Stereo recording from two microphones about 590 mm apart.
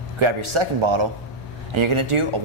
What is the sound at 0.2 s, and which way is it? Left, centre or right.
A man's voice, right.